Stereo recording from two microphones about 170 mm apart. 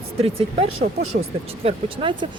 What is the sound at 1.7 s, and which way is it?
Speech, 30° right (ahead or behind).